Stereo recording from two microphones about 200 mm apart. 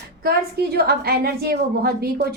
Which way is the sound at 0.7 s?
50° right (ahead or behind).